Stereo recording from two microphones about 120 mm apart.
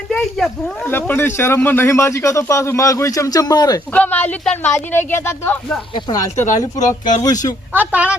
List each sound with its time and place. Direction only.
0.1 s speech: 5° left (ahead or behind)
0.9 s speech: 20° left (ahead or behind); by 3.8 s 35° left (ahead or behind)
3.9 s speech: 15° left (ahead or behind)
5.9 s speech: 30° left (ahead or behind)
7.7 s speech: 15° right (ahead or behind)